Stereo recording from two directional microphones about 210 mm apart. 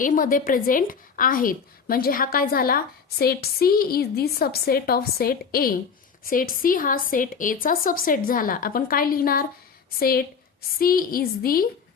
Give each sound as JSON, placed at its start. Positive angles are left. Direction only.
{"t": 0.0, "sound": "a woman's voice", "side_deg": 40}